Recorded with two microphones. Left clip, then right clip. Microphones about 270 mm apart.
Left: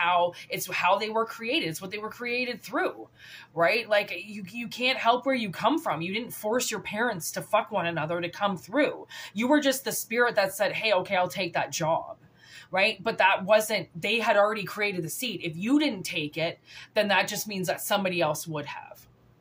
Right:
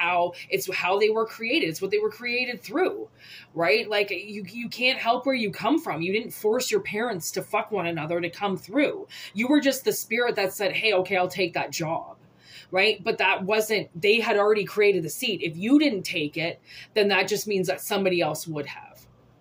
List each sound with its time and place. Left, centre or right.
0.7 s speech: left